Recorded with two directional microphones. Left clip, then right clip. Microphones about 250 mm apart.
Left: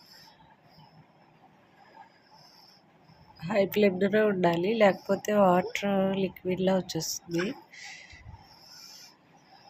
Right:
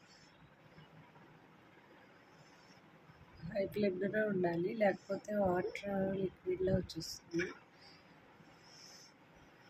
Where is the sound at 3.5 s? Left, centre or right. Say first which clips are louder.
Left 12 dB; left.